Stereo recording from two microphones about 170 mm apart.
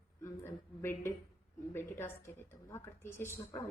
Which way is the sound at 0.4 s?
15° left (ahead or behind).